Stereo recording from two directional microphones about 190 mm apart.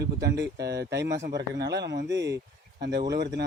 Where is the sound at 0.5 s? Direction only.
60° right (ahead or behind).